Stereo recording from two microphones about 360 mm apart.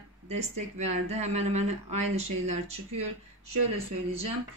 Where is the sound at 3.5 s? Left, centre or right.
Right.